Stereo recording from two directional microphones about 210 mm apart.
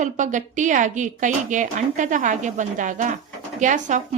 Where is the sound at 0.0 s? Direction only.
35° right (ahead or behind).